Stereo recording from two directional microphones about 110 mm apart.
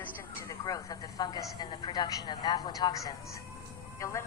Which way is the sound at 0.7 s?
35° left (ahead or behind).